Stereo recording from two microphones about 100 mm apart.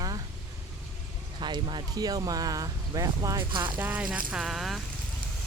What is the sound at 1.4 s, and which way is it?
Speech, 55° right (ahead or behind).